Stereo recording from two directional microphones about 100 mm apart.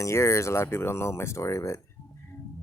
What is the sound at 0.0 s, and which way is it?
Speech, 30° left (ahead or behind).